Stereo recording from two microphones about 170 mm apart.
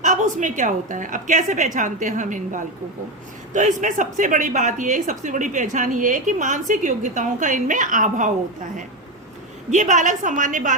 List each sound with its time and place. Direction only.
0.0 s a woman's voice: 45° right (ahead or behind)
9.6 s a woman's voice: 45° right (ahead or behind)